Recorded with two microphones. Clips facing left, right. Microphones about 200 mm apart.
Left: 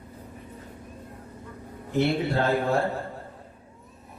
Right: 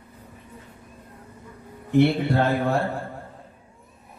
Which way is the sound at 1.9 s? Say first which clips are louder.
Right 5 dB; 55° right (ahead or behind).